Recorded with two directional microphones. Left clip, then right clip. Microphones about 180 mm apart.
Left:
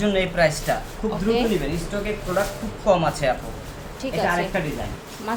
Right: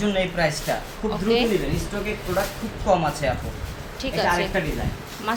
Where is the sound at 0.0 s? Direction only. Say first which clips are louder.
Left 3 dB; 10° left (ahead or behind).